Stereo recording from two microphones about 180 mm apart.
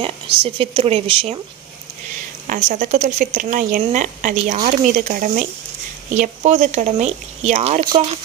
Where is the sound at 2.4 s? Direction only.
45° right (ahead or behind).